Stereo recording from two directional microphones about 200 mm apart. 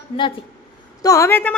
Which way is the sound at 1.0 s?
15° left (ahead or behind).